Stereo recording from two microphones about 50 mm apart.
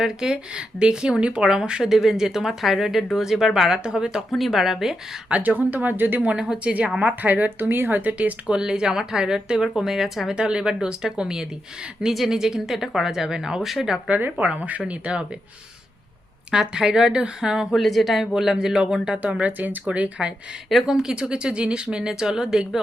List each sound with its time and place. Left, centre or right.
0.0 s a woman's voice: centre
4.3 s speech: centre
5.3 s speech: right
6.3 s a woman's voice: centre
7.0 s speech: right
8.2 s speech: right
8.5 s a woman's voice: centre
10.3 s a woman's voice: centre
14.2 s speech: right
16.5 s a woman's voice: centre
17.7 s a woman's voice: centre
19.3 s speech: right
20.8 s a woman's voice: centre